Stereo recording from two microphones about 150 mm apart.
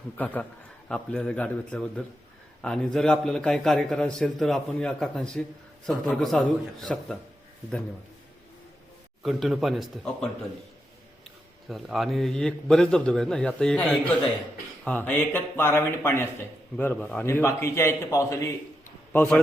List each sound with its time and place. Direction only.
0.2 s a man's voice: 10° left (ahead or behind)
9.2 s a man's voice: centre (ahead or behind)
11.7 s a man's voice: centre (ahead or behind)
17.2 s a man's voice: 20° left (ahead or behind)
19.1 s speech: 10° left (ahead or behind)